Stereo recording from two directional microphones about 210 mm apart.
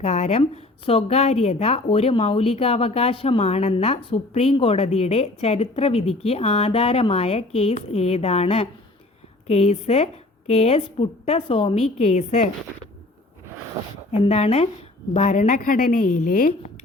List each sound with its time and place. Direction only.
0.0 s a woman's voice: 30° left (ahead or behind)
14.1 s a woman's voice: 30° left (ahead or behind)